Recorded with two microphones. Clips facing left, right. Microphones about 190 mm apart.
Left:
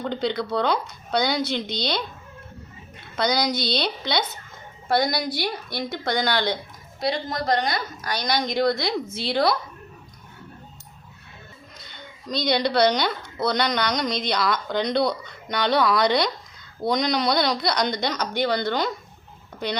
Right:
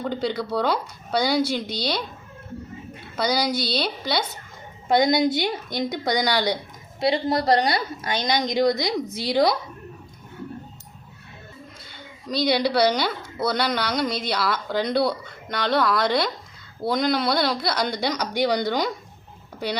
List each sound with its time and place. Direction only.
0.0 s speech: 5° right (ahead or behind)
3.2 s speech: 5° right (ahead or behind)
4.9 s a woman's voice: 20° right (ahead or behind)
7.0 s a woman's voice: 30° right (ahead or behind); by 9.6 s 15° right (ahead or behind)
11.9 s a woman's voice: 5° right (ahead or behind)